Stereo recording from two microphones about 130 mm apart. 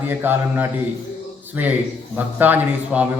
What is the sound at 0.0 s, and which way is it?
Speech, 15° right (ahead or behind).